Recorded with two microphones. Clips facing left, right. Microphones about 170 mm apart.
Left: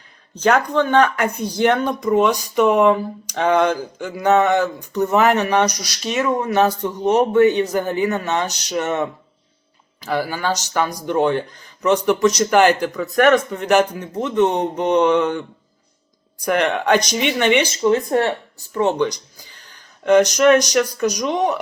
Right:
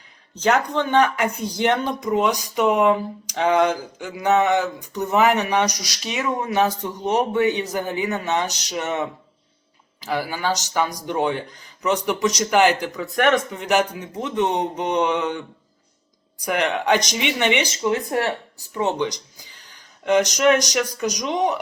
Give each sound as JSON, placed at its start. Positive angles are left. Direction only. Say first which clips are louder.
{"t": 0.3, "sound": "speech", "louder": "left 3 dB", "side_deg": -20}
{"t": 10.1, "sound": "speech", "louder": "left 2 dB", "side_deg": -15}
{"t": 16.8, "sound": "speech", "louder": "left 3 dB", "side_deg": -20}